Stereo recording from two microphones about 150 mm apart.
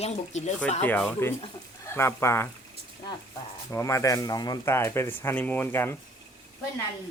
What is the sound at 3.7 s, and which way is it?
Speech, 20° left (ahead or behind).